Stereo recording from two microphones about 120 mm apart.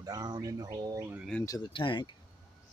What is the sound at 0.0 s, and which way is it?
Speech, 35° right (ahead or behind).